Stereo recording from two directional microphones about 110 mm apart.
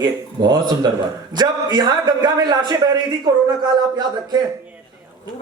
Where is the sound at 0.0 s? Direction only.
40° right (ahead or behind).